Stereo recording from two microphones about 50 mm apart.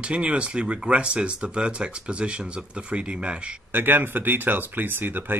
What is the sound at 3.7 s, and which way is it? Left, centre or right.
Speech, right.